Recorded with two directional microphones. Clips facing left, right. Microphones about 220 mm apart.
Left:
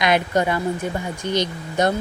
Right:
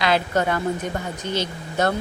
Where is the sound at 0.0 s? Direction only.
15° left (ahead or behind).